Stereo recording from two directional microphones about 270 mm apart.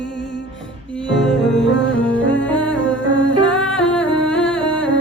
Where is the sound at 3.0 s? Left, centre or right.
Left.